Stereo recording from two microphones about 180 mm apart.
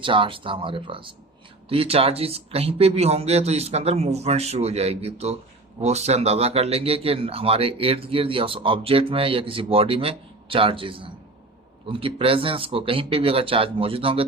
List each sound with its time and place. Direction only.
0.0 s speech: 30° right (ahead or behind)